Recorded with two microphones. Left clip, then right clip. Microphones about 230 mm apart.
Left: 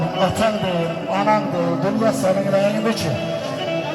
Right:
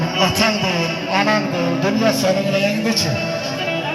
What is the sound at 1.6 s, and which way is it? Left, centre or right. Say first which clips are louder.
Music: right 1 dB; centre.